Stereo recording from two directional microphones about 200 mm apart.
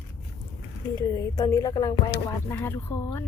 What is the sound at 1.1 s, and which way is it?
A woman's voice, 20° left (ahead or behind).